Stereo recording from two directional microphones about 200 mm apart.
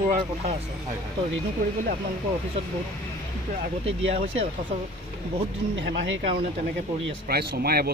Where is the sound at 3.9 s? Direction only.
70° right (ahead or behind).